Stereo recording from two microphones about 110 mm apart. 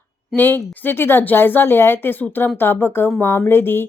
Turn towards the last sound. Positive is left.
turn(degrees=20)  # may be behind; listen again after turning